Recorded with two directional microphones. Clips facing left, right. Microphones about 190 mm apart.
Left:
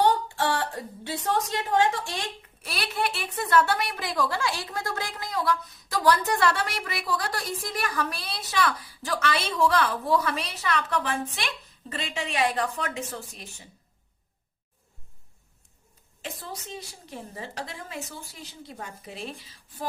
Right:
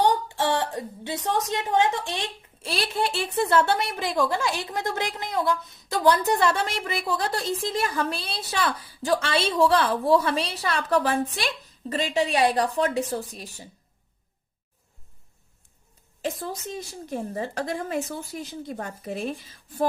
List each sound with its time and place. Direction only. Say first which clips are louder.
0.0 s a woman's voice: right 1 dB; 20° right (ahead or behind); by 13.7 s 35° right (ahead or behind)
16.2 s a woman's voice: right 8 dB; 45° right (ahead or behind)